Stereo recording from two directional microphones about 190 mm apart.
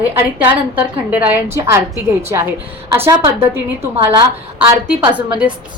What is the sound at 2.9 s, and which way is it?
A woman's voice, 15° right (ahead or behind).